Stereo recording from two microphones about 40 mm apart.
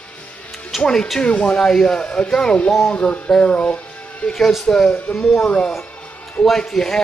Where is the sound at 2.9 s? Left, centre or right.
Left.